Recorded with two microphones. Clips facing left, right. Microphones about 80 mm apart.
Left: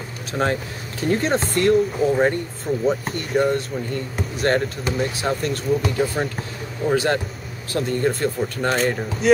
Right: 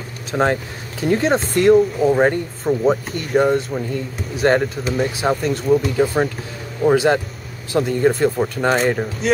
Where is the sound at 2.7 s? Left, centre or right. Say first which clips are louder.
Right 4 dB; right.